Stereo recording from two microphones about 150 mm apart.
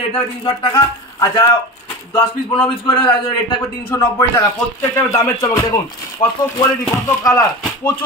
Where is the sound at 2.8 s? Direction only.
35° left (ahead or behind).